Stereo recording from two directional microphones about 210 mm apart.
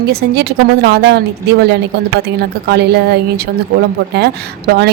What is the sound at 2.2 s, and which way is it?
A woman's voice, 50° right (ahead or behind).